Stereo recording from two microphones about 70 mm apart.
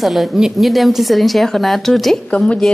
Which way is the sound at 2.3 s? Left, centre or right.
Centre.